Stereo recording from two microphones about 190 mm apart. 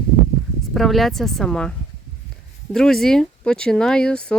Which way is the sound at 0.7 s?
Centre (ahead or behind).